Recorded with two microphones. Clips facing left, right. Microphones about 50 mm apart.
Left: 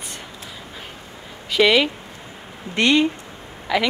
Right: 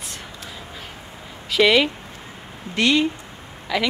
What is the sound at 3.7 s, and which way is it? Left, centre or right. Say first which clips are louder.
Speech: left 3 dB; centre.